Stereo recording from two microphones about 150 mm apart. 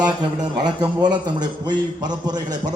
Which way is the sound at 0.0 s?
30° right (ahead or behind).